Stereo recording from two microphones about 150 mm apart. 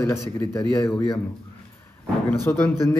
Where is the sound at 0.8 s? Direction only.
30° left (ahead or behind).